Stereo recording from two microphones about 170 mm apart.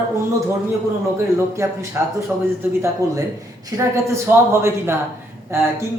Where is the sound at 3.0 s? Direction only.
20° right (ahead or behind).